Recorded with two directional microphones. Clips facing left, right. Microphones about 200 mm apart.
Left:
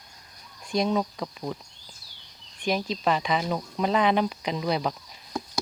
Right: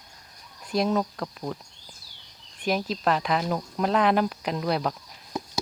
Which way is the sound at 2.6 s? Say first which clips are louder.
Right 1 dB; 5° right (ahead or behind).